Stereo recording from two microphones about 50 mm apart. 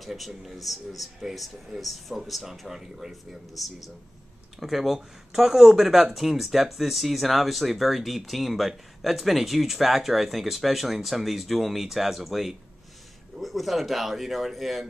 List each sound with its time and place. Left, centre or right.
0.0 s speech: centre